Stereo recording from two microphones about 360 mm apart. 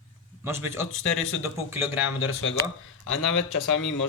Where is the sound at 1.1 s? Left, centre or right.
Left.